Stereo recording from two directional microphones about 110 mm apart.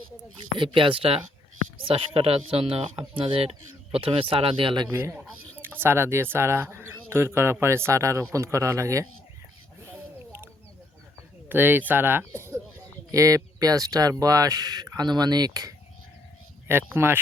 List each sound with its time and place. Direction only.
0.5 s speech: 50° right (ahead or behind)
4.9 s speech: 20° right (ahead or behind)
9.8 s a sound: 20° right (ahead or behind)
11.4 s speech: 15° right (ahead or behind); by 15.7 s 35° right (ahead or behind)
16.6 s speech: 20° right (ahead or behind)